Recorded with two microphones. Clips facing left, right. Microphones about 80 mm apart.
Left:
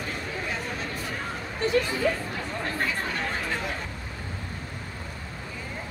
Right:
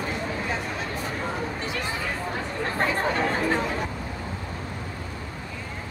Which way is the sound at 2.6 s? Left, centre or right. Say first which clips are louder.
Right 4 dB; right.